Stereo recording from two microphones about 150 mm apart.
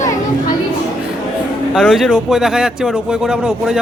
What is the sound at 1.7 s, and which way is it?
Speech, 5° left (ahead or behind).